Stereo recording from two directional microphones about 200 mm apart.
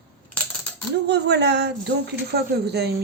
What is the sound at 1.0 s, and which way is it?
Speech, 55° right (ahead or behind).